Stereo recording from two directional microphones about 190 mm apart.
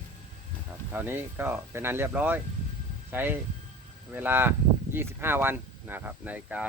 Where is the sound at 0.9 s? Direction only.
10° right (ahead or behind).